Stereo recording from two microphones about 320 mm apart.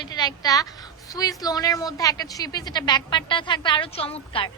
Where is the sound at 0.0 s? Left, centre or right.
Centre.